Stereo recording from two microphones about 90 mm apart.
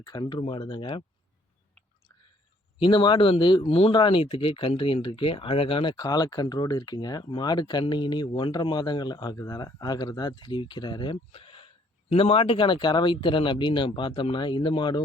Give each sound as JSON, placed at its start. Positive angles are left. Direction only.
{"t": 0.0, "sound": "speech", "side_deg": 50}
{"t": 0.4, "sound": "speech", "side_deg": 65}
{"t": 2.7, "sound": "speech", "side_deg": 65}